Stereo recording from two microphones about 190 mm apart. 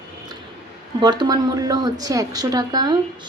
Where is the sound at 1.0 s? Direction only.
20° right (ahead or behind).